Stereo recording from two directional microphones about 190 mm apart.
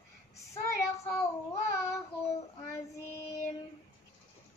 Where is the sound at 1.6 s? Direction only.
15° left (ahead or behind).